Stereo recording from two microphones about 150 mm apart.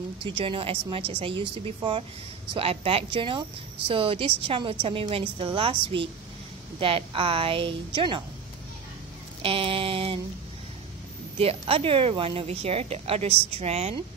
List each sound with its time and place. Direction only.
0.2 s a woman's voice: 35° right (ahead or behind)
9.4 s a woman's voice: 35° right (ahead or behind)
11.3 s a woman's voice: 40° right (ahead or behind)